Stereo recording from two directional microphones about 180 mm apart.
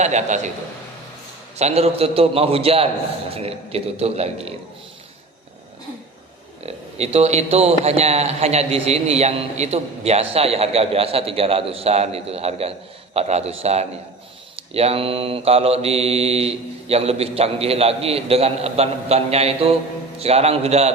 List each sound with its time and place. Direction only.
0.0 s a man's voice: 40° right (ahead or behind)
1.5 s a man's voice: 35° right (ahead or behind)
7.0 s a man's voice: 35° right (ahead or behind)